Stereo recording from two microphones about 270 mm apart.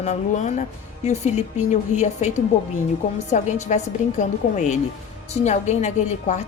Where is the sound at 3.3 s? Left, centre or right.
Left.